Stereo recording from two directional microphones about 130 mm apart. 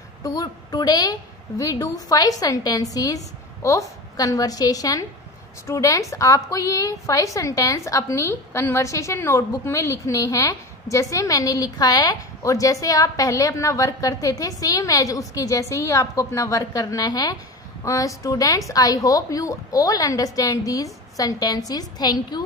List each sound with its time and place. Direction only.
0.2 s a woman's voice: 30° left (ahead or behind)